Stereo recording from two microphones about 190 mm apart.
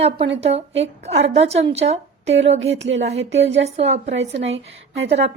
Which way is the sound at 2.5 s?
80° right.